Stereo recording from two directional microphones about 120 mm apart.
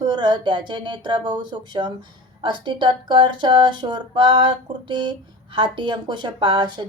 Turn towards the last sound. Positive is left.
turn(degrees=-40)  # may be behind; listen again after turning